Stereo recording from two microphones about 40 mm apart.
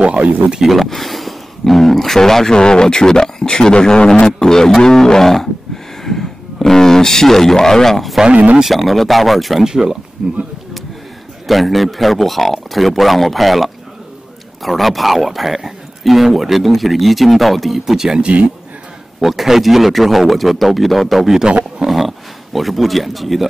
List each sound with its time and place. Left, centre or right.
0.0 s speech: right
0.7 s speech: centre
6.0 s a sound: centre
8.3 s speech: right
8.6 s speech: centre
9.7 s speech: centre
11.4 s speech: centre
19.2 s speech: centre